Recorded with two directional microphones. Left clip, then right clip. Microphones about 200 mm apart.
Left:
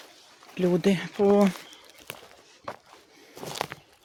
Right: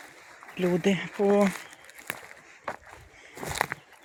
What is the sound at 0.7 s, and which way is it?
Speech, 25° left (ahead or behind).